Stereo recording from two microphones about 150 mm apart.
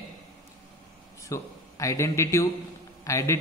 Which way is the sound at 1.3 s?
20° left (ahead or behind).